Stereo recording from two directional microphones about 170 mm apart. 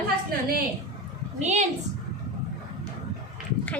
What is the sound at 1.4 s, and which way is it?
Speech, 40° right (ahead or behind).